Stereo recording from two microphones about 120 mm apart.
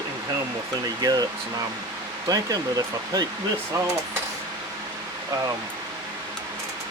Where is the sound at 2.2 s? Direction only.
30° right (ahead or behind).